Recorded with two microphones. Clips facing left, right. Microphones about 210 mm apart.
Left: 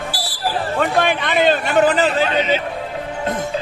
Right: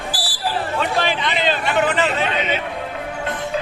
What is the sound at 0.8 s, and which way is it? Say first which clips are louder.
A man's voice: left 5 dB; 50° left (ahead or behind).